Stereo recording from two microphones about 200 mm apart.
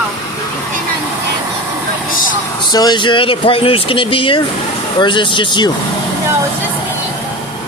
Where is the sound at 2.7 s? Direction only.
20° left (ahead or behind).